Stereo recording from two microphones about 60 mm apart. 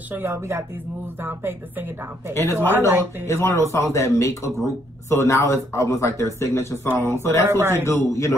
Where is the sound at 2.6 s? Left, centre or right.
Right.